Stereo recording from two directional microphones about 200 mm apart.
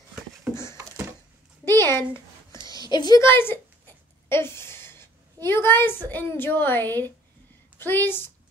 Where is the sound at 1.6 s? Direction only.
10° left (ahead or behind).